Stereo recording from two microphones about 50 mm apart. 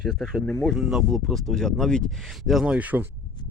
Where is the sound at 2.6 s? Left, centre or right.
Right.